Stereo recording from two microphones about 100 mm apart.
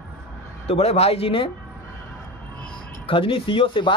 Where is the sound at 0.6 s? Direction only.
90° left; by 1.5 s 70° left (ahead or behind).